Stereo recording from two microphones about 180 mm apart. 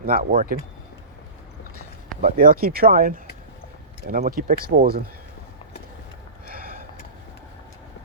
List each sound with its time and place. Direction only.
0.0 s speech: 55° right (ahead or behind)
2.3 s speech: 50° right (ahead or behind)
6.5 s sniff: 55° right (ahead or behind)